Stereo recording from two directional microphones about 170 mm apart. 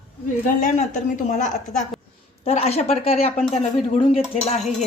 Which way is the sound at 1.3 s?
45° left (ahead or behind).